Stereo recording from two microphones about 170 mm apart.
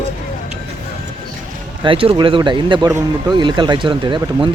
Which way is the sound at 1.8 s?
30° right (ahead or behind).